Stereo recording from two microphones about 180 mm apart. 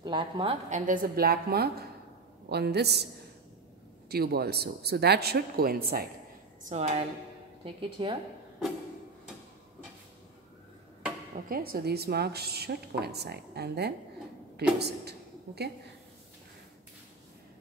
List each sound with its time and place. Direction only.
0.0 s a woman's voice: 25° right (ahead or behind)
0.7 s a woman's voice: 45° right (ahead or behind); by 3.1 s 65° right (ahead or behind)
4.1 s a woman's voice: 60° right (ahead or behind)
6.7 s speech: 40° right (ahead or behind)
7.6 s a woman's voice: 30° right (ahead or behind)
11.4 s a woman's voice: 55° right (ahead or behind)